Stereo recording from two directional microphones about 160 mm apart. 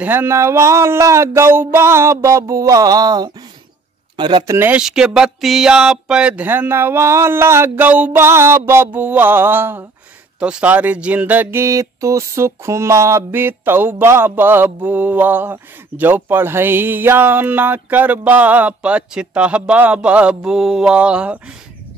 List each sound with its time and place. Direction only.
0.0 s speech: 15° right (ahead or behind); by 4.6 s 30° right (ahead or behind)
4.6 s speech: 10° right (ahead or behind)